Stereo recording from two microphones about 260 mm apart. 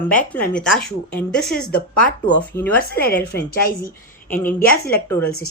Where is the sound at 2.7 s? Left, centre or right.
Left.